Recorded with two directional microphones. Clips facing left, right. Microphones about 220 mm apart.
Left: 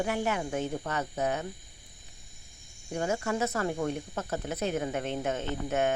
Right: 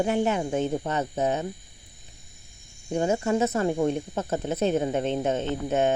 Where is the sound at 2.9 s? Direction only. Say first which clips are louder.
Right 6 dB; 25° right (ahead or behind).